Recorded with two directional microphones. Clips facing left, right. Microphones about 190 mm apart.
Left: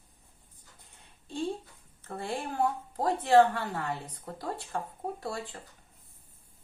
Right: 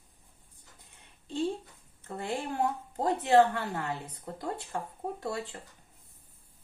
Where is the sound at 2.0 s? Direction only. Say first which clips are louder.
Right 1 dB; 25° right (ahead or behind).